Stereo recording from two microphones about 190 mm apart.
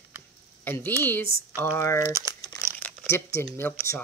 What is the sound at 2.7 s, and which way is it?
Crumpling, 10° left (ahead or behind).